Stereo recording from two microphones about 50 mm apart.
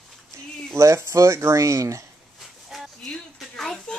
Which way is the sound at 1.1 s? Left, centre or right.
Right.